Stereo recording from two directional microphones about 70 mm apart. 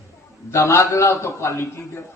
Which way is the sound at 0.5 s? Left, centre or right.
Left.